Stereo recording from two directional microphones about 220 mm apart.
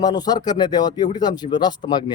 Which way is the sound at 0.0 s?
20° left (ahead or behind).